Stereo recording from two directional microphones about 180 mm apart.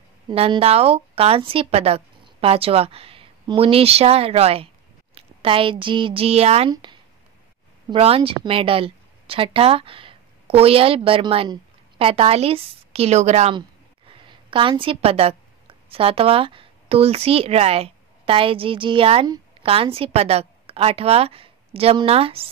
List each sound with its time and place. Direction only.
0.3 s a woman's voice: 30° right (ahead or behind)